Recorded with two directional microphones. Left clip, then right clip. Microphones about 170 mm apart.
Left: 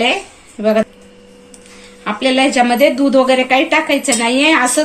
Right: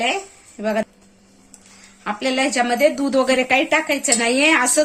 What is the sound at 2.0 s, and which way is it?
A woman's voice, 45° right (ahead or behind).